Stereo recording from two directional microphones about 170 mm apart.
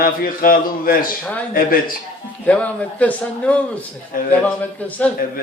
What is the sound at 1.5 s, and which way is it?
Speech, 55° left (ahead or behind).